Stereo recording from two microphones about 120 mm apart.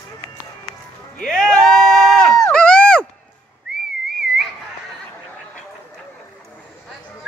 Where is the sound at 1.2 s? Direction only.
5° left (ahead or behind).